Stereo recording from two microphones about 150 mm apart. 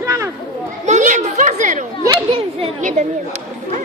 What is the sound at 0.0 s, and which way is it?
Children playing, 20° right (ahead or behind).